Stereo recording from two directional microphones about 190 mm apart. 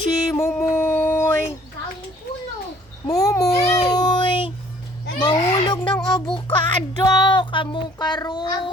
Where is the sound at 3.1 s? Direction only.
20° left (ahead or behind).